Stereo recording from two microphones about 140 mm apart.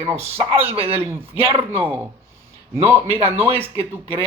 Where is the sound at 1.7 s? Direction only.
15° right (ahead or behind).